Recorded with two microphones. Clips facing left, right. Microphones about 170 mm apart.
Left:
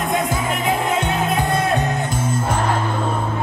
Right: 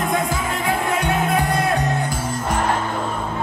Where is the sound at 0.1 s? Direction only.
20° left (ahead or behind).